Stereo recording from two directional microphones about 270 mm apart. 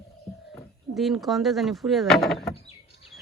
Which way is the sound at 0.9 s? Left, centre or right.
Centre.